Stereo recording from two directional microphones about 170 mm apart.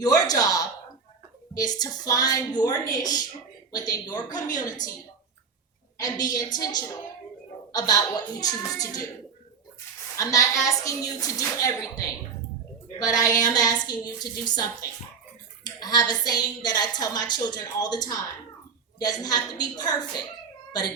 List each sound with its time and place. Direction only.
0.0 s a woman's voice: 20° left (ahead or behind)
6.0 s a woman's voice: 25° left (ahead or behind)
7.7 s a woman's voice: 20° left (ahead or behind)
10.2 s a woman's voice: 20° left (ahead or behind)
13.0 s a woman's voice: 20° left (ahead or behind)